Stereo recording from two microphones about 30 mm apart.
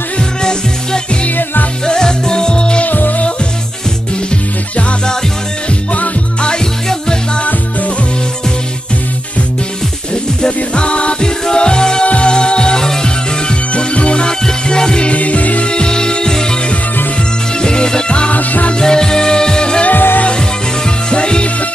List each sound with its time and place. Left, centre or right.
0.4 s music: left
2.9 s music: left
10.7 s music: left
14.4 s music: left
15.1 s music: left
15.6 s music: left
17.6 s music: left
18.3 s music: left
18.8 s music: left
19.9 s music: left
20.3 s music: left